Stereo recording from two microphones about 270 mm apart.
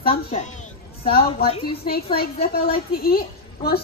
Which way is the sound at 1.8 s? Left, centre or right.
Left.